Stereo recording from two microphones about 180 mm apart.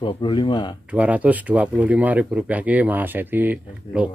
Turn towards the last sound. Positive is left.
turn(degrees=-5)  # may be behind; listen again after turning